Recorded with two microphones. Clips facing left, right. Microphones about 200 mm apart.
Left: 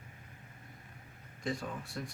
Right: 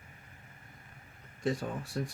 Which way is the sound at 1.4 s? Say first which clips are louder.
Right 5 dB; 40° right (ahead or behind).